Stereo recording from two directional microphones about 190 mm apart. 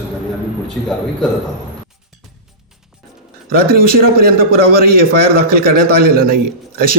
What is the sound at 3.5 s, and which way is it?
A man's voice, 50° right (ahead or behind).